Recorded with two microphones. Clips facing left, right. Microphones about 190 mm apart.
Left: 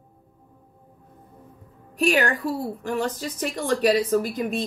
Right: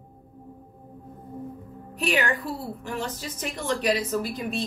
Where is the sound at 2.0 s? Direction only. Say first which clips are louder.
Left 4 dB; 40° left (ahead or behind).